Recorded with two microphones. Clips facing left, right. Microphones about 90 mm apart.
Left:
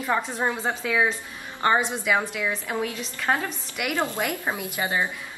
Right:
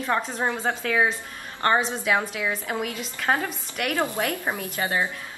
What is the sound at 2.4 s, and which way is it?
Speech, 10° right (ahead or behind).